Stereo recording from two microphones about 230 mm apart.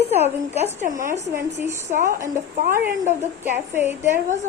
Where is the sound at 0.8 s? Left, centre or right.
Right.